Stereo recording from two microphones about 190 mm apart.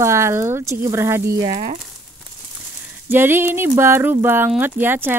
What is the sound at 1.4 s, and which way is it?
Speech, 35° right (ahead or behind).